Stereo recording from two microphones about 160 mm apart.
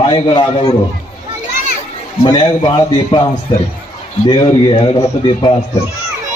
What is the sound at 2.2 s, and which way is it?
A man's voice, 30° left (ahead or behind).